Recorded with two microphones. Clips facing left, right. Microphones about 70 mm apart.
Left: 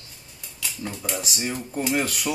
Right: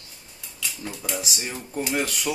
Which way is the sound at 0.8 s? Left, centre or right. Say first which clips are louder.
Left 1 dB; centre.